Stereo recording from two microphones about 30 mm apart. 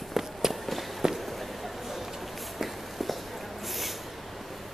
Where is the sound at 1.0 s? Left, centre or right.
Right.